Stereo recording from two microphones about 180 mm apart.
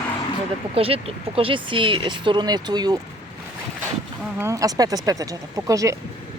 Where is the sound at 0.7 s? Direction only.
30° right (ahead or behind).